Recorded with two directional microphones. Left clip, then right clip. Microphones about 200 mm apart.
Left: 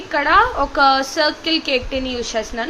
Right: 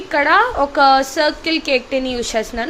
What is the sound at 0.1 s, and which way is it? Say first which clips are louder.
A woman's voice: right 1 dB; 15° right (ahead or behind).